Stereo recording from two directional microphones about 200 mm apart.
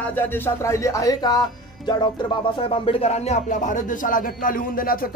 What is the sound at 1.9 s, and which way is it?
Music, 25° left (ahead or behind).